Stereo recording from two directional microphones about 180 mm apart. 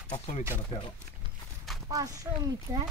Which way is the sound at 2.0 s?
20° right (ahead or behind).